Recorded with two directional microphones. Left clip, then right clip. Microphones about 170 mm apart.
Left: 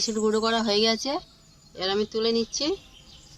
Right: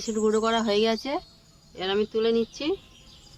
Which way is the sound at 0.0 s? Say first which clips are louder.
Even; 5° right (ahead or behind).